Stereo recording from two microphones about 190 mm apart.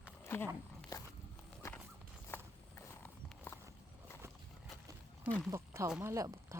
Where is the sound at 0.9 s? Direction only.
20° left (ahead or behind).